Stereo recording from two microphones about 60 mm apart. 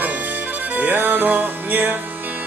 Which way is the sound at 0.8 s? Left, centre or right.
Right.